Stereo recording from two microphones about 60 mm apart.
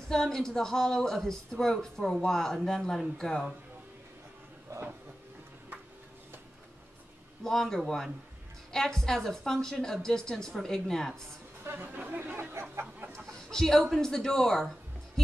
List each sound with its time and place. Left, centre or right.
0.1 s speech: centre
7.4 s speech: centre
11.6 s speech: right
13.1 s speech: centre